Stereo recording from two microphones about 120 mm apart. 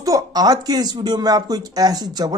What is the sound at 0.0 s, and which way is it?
Speech, 30° right (ahead or behind).